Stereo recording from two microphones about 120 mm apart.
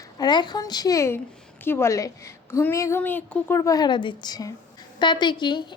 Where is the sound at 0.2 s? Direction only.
40° left (ahead or behind).